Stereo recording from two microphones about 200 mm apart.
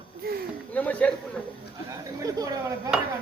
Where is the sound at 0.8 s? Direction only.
5° left (ahead or behind).